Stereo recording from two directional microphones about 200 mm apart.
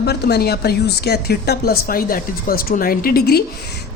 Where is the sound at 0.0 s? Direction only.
55° left (ahead or behind).